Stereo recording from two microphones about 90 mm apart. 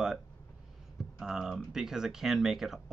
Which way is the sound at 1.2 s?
5° right (ahead or behind).